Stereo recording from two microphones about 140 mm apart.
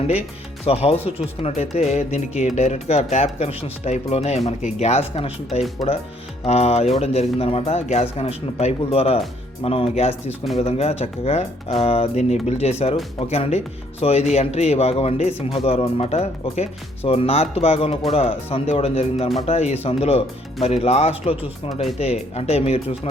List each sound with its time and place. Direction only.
0.1 s speech: 45° left (ahead or behind)
6.4 s speech: 50° left (ahead or behind)